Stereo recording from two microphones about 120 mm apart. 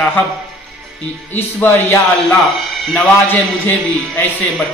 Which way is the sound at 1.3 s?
15° left (ahead or behind).